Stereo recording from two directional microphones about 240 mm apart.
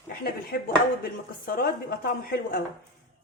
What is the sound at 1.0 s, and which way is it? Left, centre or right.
A woman's voice, left.